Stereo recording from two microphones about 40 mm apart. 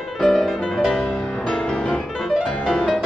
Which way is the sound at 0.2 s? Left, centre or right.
Centre.